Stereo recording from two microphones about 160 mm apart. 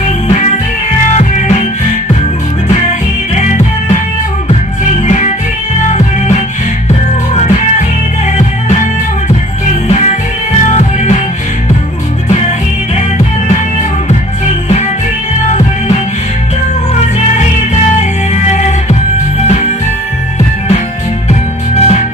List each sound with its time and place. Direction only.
0.3 s music: 45° left (ahead or behind)
3.3 s music: 50° left (ahead or behind)
5.0 s music: 50° left (ahead or behind)
9.8 s music: 45° left (ahead or behind)
12.3 s music: 45° left (ahead or behind)
18.3 s music: 45° left (ahead or behind)
21.3 s music: 45° left (ahead or behind)